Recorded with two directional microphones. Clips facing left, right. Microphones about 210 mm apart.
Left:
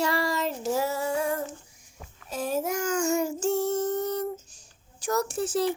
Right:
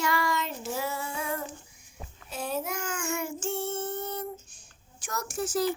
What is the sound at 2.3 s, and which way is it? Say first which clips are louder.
Child singing: left 5 dB; 45° left (ahead or behind).